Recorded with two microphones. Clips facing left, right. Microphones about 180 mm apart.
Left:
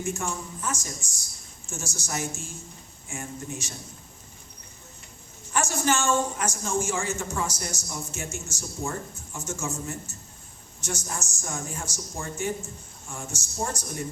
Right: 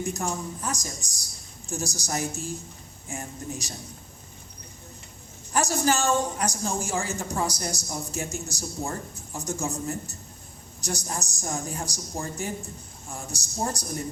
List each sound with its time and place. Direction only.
0.0 s a man's voice: 35° right (ahead or behind)
5.5 s a man's voice: 35° right (ahead or behind)